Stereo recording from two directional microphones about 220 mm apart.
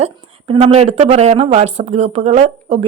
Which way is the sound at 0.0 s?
25° right (ahead or behind).